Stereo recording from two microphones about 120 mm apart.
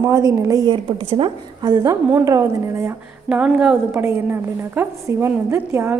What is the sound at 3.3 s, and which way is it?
A woman's voice, 10° right (ahead or behind).